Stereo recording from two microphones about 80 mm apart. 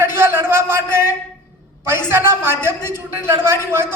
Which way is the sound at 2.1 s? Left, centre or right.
Right.